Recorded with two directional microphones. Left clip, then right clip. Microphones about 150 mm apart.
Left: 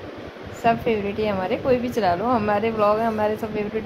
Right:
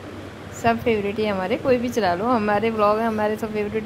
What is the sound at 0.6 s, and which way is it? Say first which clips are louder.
A woman's voice: even; 15° right (ahead or behind).